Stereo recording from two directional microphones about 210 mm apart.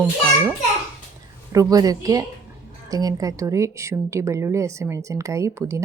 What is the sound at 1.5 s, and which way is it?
Speech, 15° right (ahead or behind).